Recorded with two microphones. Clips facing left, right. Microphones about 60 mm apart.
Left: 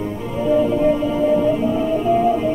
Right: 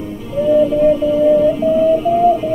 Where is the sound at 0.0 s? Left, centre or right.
Left.